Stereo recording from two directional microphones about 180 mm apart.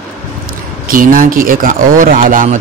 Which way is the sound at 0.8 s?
50° right (ahead or behind).